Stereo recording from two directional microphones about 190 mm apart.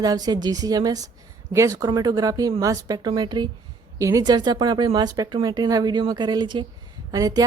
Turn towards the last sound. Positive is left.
turn(degrees=-20)  # may be behind; listen again after turning